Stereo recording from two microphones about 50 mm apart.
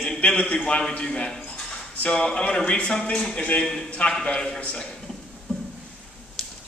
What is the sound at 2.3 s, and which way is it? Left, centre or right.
A man's voice, centre.